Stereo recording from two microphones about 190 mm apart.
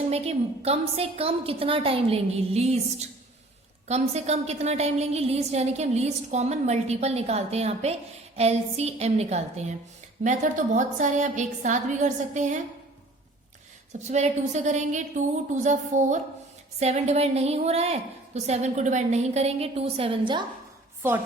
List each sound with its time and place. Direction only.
0.1 s a woman's voice: 35° right (ahead or behind)
14.1 s a woman's voice: 35° right (ahead or behind)